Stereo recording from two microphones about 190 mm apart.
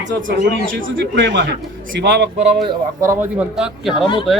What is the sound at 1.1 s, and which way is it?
Speech, 65° right (ahead or behind).